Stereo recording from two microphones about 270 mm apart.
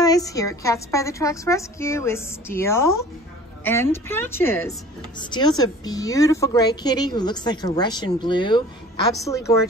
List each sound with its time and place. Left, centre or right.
0.0 s a woman's voice: centre